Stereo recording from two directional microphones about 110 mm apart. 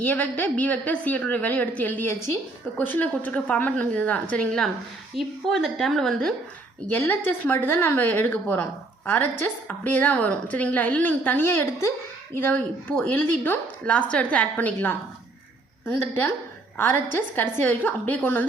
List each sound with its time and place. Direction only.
0.0 s a woman's voice: 15° left (ahead or behind)
6.9 s a woman's voice: 20° left (ahead or behind)
16.7 s a woman's voice: 20° left (ahead or behind)